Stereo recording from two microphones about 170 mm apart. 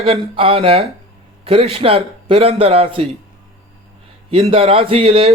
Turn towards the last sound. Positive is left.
turn(degrees=-35)  # may be behind; listen again after turning